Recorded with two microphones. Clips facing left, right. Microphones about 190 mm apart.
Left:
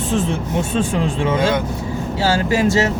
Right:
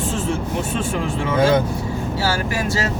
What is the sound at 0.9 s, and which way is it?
Speech, 25° left (ahead or behind).